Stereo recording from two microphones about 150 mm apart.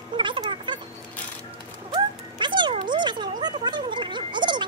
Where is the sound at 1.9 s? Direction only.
30° right (ahead or behind).